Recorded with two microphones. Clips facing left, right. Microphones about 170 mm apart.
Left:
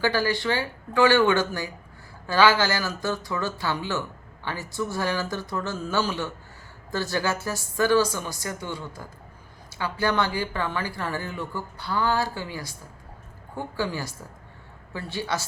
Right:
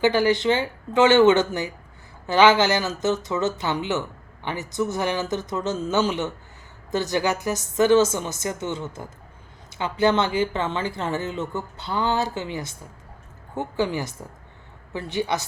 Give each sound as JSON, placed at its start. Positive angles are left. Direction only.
{"t": 0.0, "sound": "speech", "side_deg": -20}